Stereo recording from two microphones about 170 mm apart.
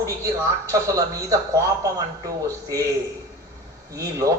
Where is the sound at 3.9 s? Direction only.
20° right (ahead or behind).